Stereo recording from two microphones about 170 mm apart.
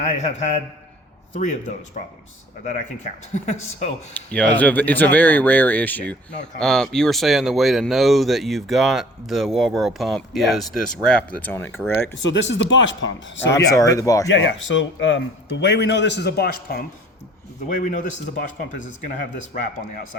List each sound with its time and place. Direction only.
0.0 s a man's voice: 40° left (ahead or behind)
3.3 s speech: 45° left (ahead or behind)
4.1 s speech: 10° left (ahead or behind)
12.3 s a man's voice: 90° left
13.5 s speech: 20° left (ahead or behind)
14.3 s a man's voice: 90° left; by 16.8 s 65° left (ahead or behind)
17.7 s speech: 50° left (ahead or behind)